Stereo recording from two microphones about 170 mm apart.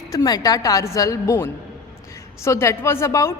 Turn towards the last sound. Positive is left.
turn(degrees=15)  # may be behind; listen again after turning